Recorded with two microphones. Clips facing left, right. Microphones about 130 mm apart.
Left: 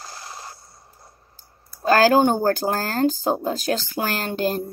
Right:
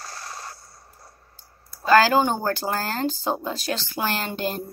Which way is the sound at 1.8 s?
45° left (ahead or behind).